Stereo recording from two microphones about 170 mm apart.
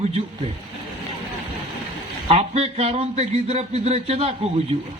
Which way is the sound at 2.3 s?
35° right (ahead or behind).